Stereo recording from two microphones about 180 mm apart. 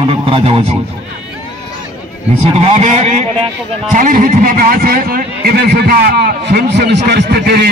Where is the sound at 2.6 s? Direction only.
35° right (ahead or behind).